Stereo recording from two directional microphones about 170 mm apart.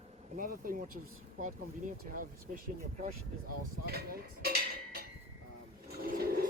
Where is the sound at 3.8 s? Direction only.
65° right (ahead or behind).